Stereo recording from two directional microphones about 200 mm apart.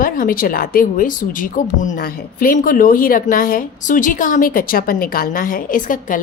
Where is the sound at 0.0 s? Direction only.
45° left (ahead or behind).